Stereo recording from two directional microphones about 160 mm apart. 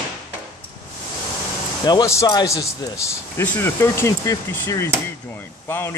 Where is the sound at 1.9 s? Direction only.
20° left (ahead or behind).